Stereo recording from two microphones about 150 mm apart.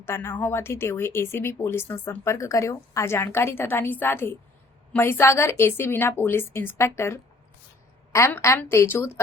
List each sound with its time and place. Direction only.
0.0 s speech: 15° left (ahead or behind)